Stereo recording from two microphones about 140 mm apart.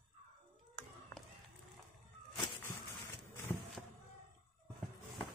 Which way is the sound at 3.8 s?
10° left (ahead or behind).